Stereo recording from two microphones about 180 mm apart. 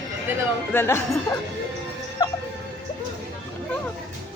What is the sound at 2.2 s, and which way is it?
Music, 20° left (ahead or behind).